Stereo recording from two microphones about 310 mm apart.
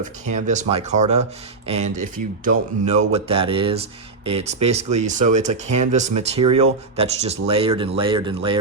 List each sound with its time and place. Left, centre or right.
0.0 s speech: right